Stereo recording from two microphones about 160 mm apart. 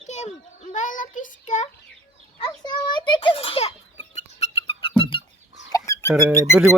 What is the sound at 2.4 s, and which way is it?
A child's voice, 30° left (ahead or behind).